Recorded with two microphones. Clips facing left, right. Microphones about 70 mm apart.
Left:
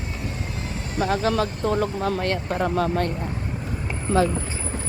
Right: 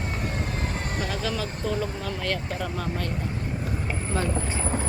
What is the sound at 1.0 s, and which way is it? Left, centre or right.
Speech, left.